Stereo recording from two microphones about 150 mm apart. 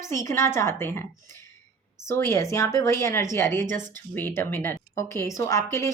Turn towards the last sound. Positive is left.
turn(degrees=20)  # may be behind; listen again after turning